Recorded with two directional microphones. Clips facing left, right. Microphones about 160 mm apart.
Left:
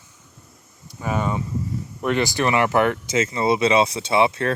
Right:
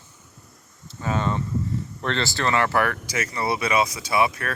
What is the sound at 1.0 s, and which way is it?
Speech, 10° left (ahead or behind).